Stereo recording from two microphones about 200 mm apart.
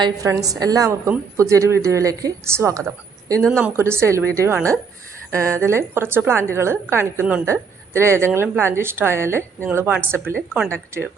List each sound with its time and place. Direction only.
0.0 s a woman's voice: 15° right (ahead or behind)